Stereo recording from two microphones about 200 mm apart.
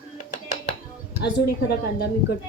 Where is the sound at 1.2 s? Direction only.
55° left (ahead or behind).